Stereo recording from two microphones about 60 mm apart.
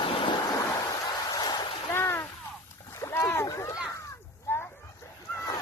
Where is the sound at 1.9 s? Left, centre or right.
Left.